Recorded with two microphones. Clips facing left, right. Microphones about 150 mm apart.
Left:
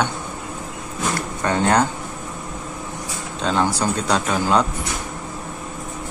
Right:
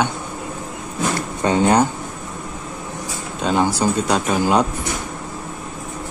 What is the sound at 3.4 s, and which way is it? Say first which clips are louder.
Speech: right 2 dB; 10° right (ahead or behind).